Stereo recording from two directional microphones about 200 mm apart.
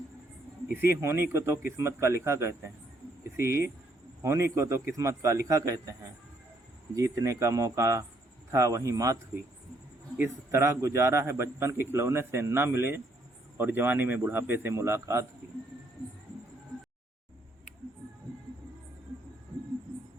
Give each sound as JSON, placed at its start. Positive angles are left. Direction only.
{"t": 0.7, "sound": "a man's voice", "side_deg": -10}
{"t": 4.2, "sound": "a man's voice", "side_deg": -15}
{"t": 6.9, "sound": "a man's voice", "side_deg": -15}
{"t": 10.2, "sound": "a man's voice", "side_deg": -15}